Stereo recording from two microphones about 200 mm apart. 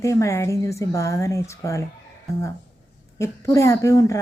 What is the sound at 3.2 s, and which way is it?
Speech, 15° left (ahead or behind).